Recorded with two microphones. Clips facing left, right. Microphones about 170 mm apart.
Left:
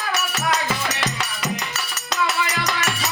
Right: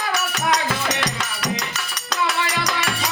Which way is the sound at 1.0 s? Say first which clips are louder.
Even; 5° left (ahead or behind).